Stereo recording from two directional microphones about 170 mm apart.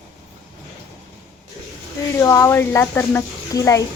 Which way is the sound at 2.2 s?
20° left (ahead or behind).